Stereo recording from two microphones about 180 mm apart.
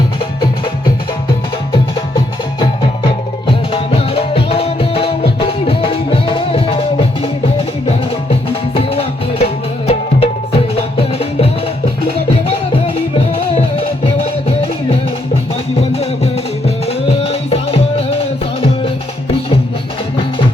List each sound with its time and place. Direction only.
3.4 s music: 30° left (ahead or behind)
8.7 s music: 30° left (ahead or behind)
12.5 s music: 30° left (ahead or behind)